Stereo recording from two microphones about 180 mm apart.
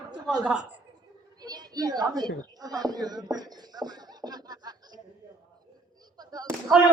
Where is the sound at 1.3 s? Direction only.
20° right (ahead or behind).